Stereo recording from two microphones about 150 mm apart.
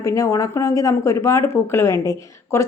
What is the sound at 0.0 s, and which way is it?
Speech, 20° left (ahead or behind).